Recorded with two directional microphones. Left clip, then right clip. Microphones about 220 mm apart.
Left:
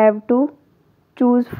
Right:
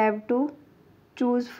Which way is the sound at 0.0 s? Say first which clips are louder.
Left 9 dB; 40° left (ahead or behind).